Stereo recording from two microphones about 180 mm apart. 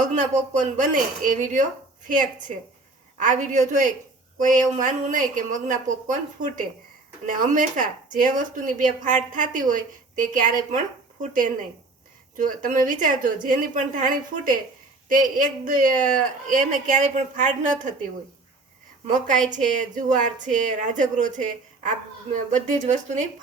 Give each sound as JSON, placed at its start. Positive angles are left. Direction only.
{"t": 0.0, "sound": "speech", "side_deg": -40}
{"t": 3.2, "sound": "speech", "side_deg": -45}
{"t": 19.0, "sound": "speech", "side_deg": -45}